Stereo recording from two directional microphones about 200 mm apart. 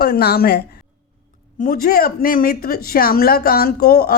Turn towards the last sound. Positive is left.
turn(degrees=50)  # may be behind; listen again after turning